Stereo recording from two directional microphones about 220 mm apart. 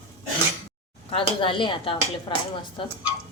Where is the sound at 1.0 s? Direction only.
25° left (ahead or behind).